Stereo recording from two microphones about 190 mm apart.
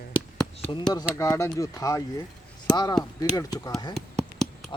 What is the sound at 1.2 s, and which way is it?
Speech, 15° left (ahead or behind).